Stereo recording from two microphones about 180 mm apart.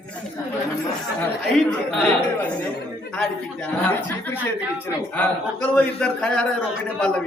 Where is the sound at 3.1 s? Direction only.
5° left (ahead or behind).